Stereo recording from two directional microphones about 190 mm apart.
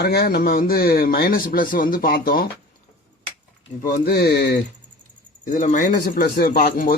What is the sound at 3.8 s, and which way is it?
Speech, 45° left (ahead or behind).